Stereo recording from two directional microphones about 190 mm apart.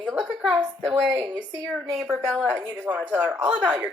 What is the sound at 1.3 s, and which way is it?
A woman's voice, 5° left (ahead or behind).